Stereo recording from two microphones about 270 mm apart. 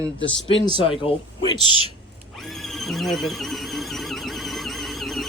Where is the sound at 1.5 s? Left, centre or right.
Centre.